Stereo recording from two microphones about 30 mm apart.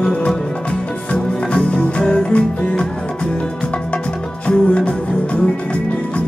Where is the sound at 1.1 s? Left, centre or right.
Left.